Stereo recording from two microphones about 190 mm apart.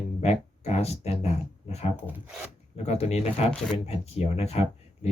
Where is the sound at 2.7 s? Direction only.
35° left (ahead or behind).